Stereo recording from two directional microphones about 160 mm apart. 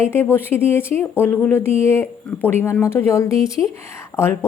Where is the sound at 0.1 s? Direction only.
15° left (ahead or behind).